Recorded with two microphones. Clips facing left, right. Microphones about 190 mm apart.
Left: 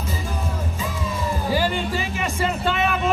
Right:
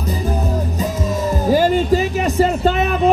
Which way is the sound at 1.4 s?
45° right (ahead or behind).